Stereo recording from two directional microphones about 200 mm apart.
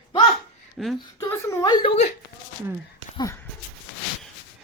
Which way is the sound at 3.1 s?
15° left (ahead or behind).